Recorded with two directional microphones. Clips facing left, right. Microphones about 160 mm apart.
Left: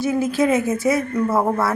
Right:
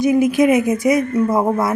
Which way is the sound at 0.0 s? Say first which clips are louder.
Right 5 dB; 15° right (ahead or behind).